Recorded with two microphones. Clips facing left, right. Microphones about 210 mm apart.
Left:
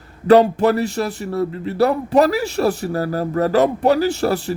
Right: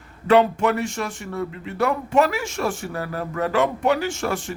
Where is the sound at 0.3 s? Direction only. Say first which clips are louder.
Left 5 dB; 35° left (ahead or behind).